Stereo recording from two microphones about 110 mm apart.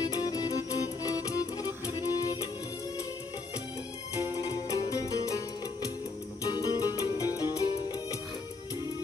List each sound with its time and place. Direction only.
0.0 s music: 35° left (ahead or behind)
4.2 s music: 35° left (ahead or behind)